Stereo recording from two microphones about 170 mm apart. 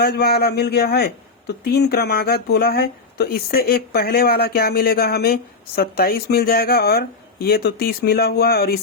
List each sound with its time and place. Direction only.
0.0 s a man's voice: 65° left (ahead or behind)